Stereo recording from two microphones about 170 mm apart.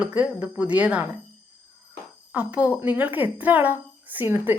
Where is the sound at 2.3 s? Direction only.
10° right (ahead or behind).